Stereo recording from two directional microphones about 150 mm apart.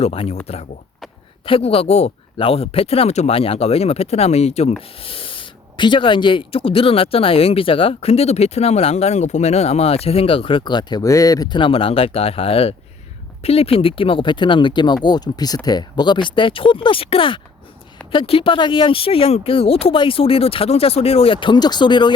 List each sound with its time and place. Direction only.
0.0 s speech: 40° left (ahead or behind)
1.5 s speech: 40° left (ahead or behind)
21.4 s speech: 30° left (ahead or behind)